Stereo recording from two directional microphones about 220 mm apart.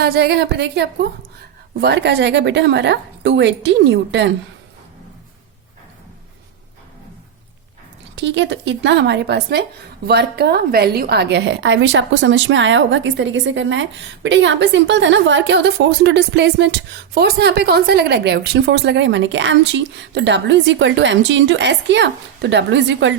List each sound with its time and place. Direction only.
0.0 s a woman's voice: 45° right (ahead or behind)
8.1 s a woman's voice: 55° right (ahead or behind)